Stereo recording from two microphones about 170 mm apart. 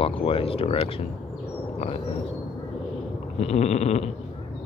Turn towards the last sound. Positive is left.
turn(degrees=40)  # may be behind; listen again after turning